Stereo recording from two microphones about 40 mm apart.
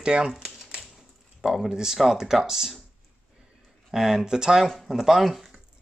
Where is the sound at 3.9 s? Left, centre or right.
Centre.